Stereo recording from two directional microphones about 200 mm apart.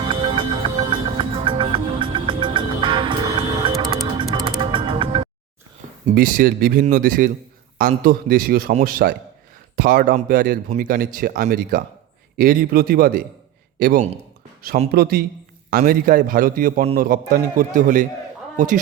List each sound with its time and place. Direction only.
0.0 s music: 25° right (ahead or behind)
6.1 s a man's voice: 45° right (ahead or behind)